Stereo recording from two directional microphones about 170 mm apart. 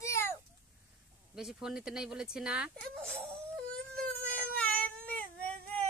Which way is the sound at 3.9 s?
10° left (ahead or behind).